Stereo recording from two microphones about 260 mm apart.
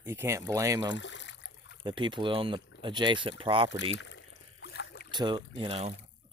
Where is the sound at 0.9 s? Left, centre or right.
Left.